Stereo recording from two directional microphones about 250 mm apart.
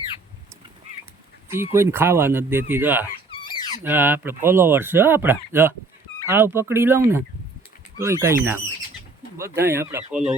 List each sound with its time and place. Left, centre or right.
1.5 s speech: centre
3.4 s a sound: centre
3.8 s speech: centre